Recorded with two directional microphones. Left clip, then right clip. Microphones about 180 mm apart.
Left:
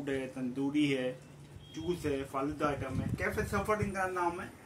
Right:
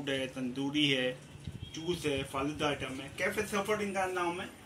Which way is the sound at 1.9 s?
10° left (ahead or behind).